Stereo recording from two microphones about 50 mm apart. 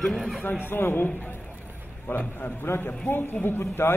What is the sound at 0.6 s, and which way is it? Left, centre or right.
Speech, left.